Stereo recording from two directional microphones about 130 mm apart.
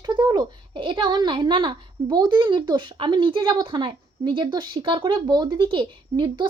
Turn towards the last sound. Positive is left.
turn(degrees=-40)  # may be behind; listen again after turning